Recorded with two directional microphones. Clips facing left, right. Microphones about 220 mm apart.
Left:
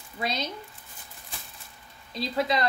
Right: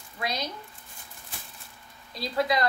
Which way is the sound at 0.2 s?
25° left (ahead or behind).